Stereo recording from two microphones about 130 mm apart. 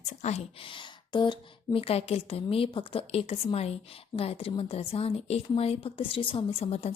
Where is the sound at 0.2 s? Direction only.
55° left (ahead or behind).